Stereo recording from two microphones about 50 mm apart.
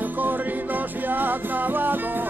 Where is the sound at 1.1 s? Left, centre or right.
Right.